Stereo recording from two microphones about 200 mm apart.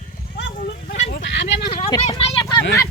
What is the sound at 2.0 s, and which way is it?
Speech, 30° left (ahead or behind).